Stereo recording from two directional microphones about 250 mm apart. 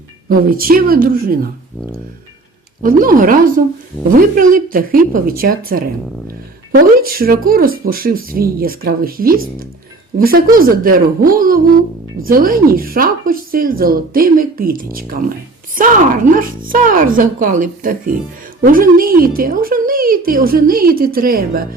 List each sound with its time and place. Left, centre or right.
0.3 s speech: right
2.8 s speech: right